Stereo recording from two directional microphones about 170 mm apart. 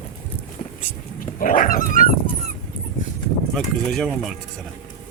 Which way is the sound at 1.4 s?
55° left (ahead or behind).